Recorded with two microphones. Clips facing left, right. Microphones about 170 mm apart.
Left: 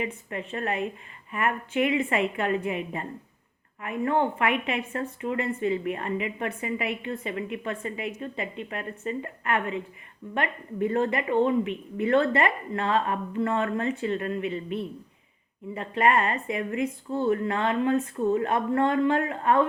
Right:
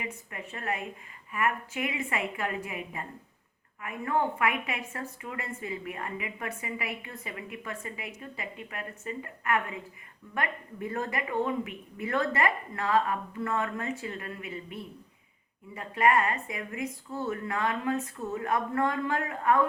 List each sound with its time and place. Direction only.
0.0 s a woman's voice: 30° left (ahead or behind)